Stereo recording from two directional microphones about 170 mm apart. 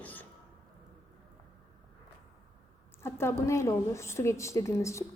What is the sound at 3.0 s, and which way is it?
A woman's voice, 15° left (ahead or behind).